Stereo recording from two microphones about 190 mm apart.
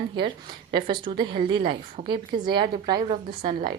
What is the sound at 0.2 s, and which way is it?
A woman's voice, 25° right (ahead or behind).